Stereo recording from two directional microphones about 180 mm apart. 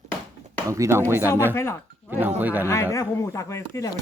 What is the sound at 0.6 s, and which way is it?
Speech, 15° right (ahead or behind).